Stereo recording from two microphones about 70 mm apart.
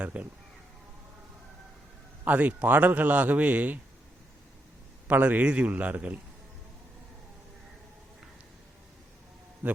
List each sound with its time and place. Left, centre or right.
0.0 s a man's voice: right
2.2 s a man's voice: right
5.0 s a man's voice: right